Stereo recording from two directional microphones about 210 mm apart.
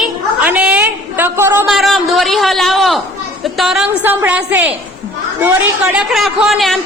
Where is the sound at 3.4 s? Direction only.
Centre (ahead or behind).